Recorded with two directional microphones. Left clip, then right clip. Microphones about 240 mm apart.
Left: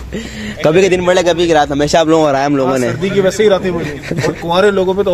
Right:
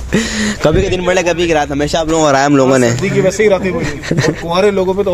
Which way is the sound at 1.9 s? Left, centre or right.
Left.